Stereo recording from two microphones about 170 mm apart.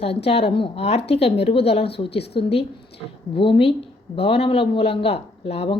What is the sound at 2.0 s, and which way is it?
Speech, 75° left (ahead or behind).